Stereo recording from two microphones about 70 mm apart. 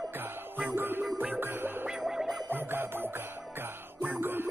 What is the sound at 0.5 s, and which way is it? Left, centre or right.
Music, right.